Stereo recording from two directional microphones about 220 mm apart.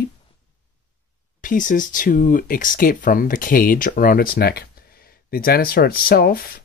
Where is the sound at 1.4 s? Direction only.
35° left (ahead or behind).